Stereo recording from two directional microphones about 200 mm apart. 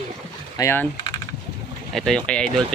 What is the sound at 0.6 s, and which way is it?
Speech, 15° left (ahead or behind).